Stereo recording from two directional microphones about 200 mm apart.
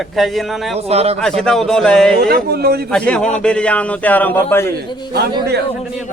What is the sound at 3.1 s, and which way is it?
A man's voice, 5° left (ahead or behind).